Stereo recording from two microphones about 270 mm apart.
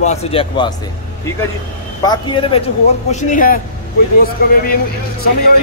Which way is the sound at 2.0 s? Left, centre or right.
Centre.